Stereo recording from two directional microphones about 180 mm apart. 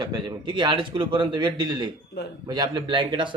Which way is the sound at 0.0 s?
25° right (ahead or behind).